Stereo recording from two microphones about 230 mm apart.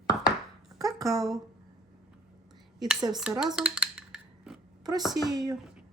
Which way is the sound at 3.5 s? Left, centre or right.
Centre.